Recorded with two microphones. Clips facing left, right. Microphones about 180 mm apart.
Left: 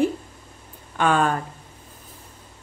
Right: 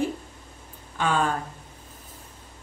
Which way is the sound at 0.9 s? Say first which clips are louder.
Left 4 dB; 60° left (ahead or behind).